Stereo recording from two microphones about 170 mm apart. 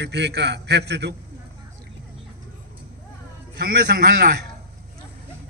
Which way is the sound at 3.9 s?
75° right (ahead or behind).